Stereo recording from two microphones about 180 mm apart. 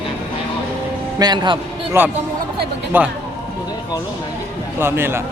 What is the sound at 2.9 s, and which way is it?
Speech, 10° right (ahead or behind).